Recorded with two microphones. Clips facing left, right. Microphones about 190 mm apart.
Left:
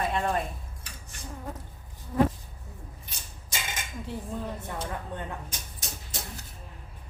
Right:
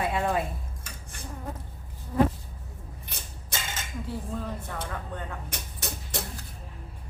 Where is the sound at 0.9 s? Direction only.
45° right (ahead or behind).